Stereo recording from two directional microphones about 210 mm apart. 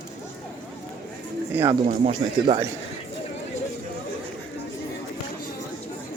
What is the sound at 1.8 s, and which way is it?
Speech, 35° right (ahead or behind).